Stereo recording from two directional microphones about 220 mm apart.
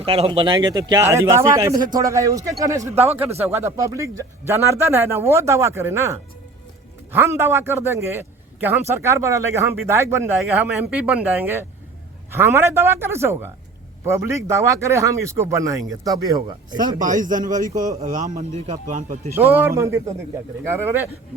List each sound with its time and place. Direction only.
0.0 s speech: 25° right (ahead or behind)
2.9 s speech: 30° right (ahead or behind)
3.5 s a man's voice: 15° right (ahead or behind)
17.0 s a man's voice: 35° right (ahead or behind)
19.4 s speech: 10° right (ahead or behind)